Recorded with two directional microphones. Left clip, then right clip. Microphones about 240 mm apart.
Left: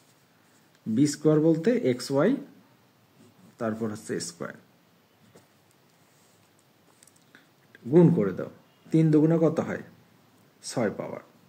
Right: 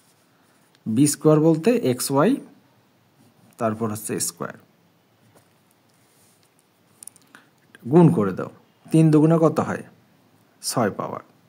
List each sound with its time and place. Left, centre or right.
1.0 s speech: right
3.5 s speech: right
7.9 s speech: right